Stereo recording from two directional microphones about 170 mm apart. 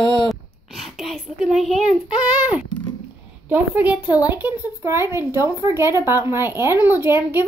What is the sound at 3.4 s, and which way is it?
A child's voice, 10° right (ahead or behind).